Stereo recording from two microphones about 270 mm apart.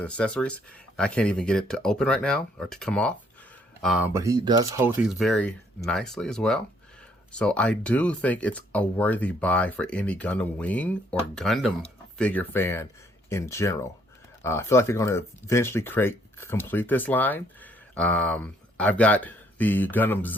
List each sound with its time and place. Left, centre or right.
0.0 s speech: centre